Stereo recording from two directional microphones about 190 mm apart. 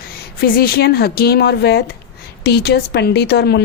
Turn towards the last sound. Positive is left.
turn(degrees=60)  # may be behind; listen again after turning